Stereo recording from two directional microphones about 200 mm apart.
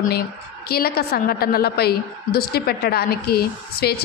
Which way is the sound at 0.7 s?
50° left (ahead or behind).